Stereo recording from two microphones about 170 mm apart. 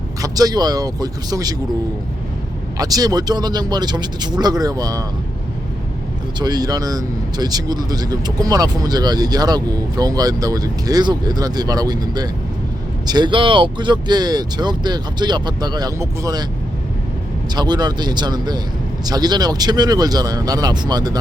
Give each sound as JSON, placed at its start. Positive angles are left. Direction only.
{"t": 0.2, "sound": "speech", "side_deg": -20}
{"t": 2.7, "sound": "speech", "side_deg": -20}
{"t": 6.4, "sound": "speech", "side_deg": -25}
{"t": 17.5, "sound": "speech", "side_deg": -25}